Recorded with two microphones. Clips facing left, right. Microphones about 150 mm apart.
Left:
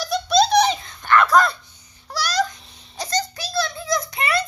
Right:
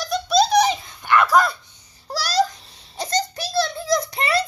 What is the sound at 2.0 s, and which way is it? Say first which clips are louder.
Babbling: right 2 dB; 35° right (ahead or behind).